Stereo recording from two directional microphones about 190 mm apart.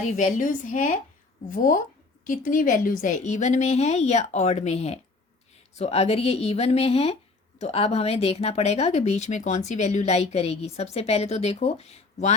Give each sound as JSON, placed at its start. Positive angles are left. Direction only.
{"t": 0.2, "sound": "a woman's voice", "side_deg": 40}